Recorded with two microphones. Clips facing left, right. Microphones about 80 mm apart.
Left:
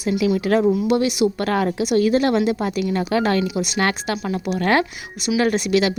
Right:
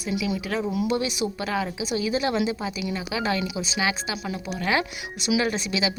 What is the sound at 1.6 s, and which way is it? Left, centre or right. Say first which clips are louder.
A woman's voice: left 12 dB; left.